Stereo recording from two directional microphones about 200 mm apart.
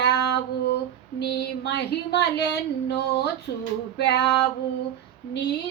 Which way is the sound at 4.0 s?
55° left (ahead or behind).